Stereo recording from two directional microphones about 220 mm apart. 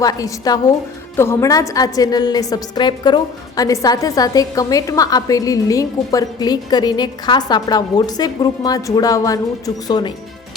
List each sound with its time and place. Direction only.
0.0 s a woman's voice: 15° left (ahead or behind)